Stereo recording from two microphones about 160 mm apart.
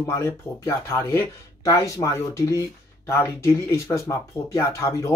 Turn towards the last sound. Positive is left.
turn(degrees=20)  # may be behind; listen again after turning